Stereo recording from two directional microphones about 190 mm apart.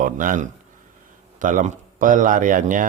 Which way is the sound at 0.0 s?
45° right (ahead or behind).